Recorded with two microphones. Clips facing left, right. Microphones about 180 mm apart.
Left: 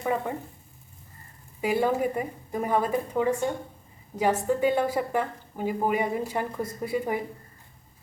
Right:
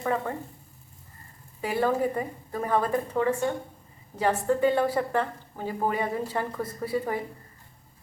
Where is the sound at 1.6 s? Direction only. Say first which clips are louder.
Left 1 dB; 15° left (ahead or behind).